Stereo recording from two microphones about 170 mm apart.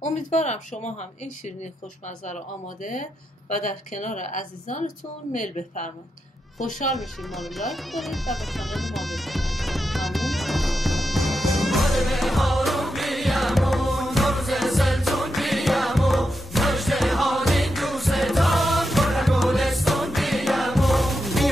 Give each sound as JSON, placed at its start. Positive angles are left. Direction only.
{"t": 0.0, "sound": "speech", "side_deg": 45}
{"t": 2.0, "sound": "speech", "side_deg": 45}
{"t": 6.9, "sound": "music", "side_deg": 0}